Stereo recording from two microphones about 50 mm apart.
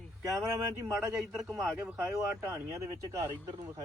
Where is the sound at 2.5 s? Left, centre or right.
Right.